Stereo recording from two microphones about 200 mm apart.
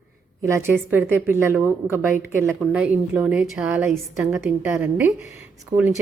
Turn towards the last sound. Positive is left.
turn(degrees=-20)  # may be behind; listen again after turning